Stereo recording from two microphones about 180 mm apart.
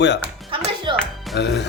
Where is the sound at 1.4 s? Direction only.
70° left (ahead or behind).